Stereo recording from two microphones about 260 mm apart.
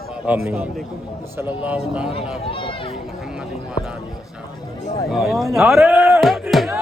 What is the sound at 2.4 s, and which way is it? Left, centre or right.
Speech, left.